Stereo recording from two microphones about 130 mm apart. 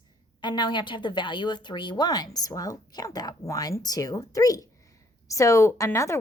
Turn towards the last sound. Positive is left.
turn(degrees=20)  # may be behind; listen again after turning